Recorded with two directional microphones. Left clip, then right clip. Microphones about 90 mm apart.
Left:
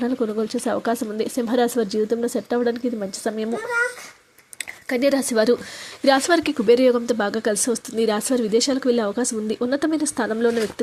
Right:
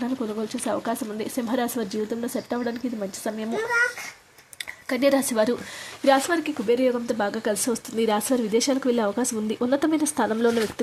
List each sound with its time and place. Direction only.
0.0 s speech: 55° left (ahead or behind)
4.9 s speech: 25° left (ahead or behind)
6.1 s speech: 45° left (ahead or behind)
6.3 s speech: 65° left (ahead or behind)
7.1 s speech: 30° left (ahead or behind)
7.5 s speech: 15° left (ahead or behind)